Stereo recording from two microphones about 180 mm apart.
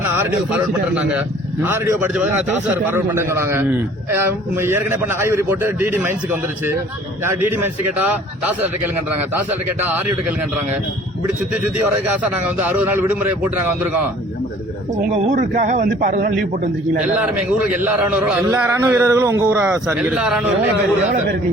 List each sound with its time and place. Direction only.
0.1 s a man's voice: 10° right (ahead or behind)
9.5 s a man's voice: 10° right (ahead or behind)
12.0 s a man's voice: 10° right (ahead or behind)
15.1 s a man's voice: 45° right (ahead or behind)
17.3 s a man's voice: 10° right (ahead or behind)
20.7 s speech: 80° right